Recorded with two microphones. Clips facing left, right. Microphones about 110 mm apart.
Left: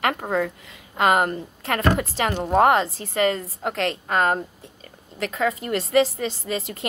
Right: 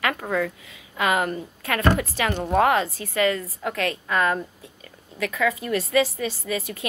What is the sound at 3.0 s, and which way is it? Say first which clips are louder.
Speech: left 1 dB; 30° left (ahead or behind).